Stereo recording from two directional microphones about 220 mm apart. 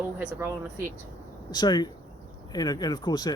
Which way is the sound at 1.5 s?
20° left (ahead or behind).